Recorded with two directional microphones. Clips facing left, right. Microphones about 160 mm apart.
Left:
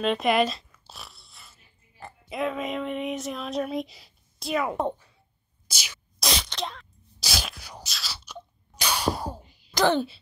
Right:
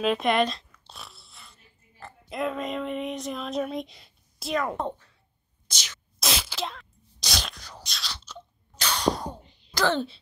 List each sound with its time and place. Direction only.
0.0 s a sound: centre (ahead or behind)
2.0 s music: 15° left (ahead or behind)
2.3 s speech: centre (ahead or behind)
5.7 s whispering: 10° left (ahead or behind)
6.1 s sneeze: centre (ahead or behind)
9.8 s speech: 15° left (ahead or behind)